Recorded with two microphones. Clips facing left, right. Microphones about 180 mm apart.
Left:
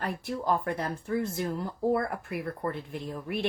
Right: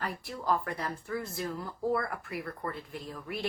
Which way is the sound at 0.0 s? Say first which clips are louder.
Left 4 dB; 25° left (ahead or behind).